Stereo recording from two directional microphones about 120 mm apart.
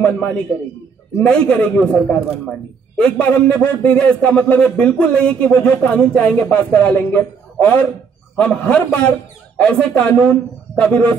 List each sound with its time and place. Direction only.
0.0 s a man's voice: 15° left (ahead or behind)